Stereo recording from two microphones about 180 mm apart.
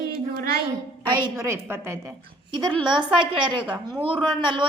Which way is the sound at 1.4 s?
15° right (ahead or behind).